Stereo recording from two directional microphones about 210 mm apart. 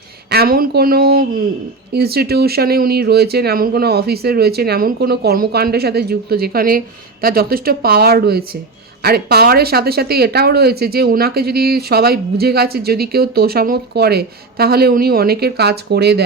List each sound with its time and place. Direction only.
0.3 s speech: 45° right (ahead or behind)